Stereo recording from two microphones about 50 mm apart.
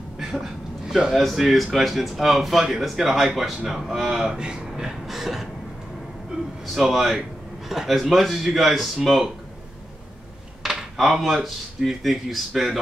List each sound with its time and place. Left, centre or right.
0.2 s a sound: centre
1.1 s speech: centre
4.4 s speech: centre
6.3 s a sound: centre
6.7 s speech: centre
10.6 s speech: centre